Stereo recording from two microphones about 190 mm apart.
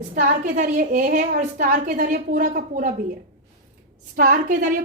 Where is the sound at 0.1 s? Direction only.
45° right (ahead or behind).